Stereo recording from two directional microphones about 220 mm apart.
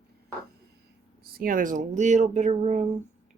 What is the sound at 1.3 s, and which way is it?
Speech, 40° right (ahead or behind).